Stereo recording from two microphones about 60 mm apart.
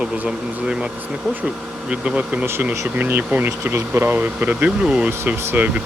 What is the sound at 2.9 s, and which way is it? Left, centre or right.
Speech, right.